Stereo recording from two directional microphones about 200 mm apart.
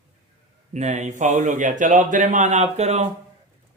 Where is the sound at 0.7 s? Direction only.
35° right (ahead or behind).